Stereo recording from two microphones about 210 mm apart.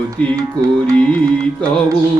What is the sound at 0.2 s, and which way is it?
Music, 5° left (ahead or behind).